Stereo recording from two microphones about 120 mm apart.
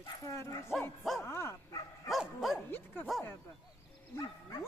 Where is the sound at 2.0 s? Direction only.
Centre (ahead or behind).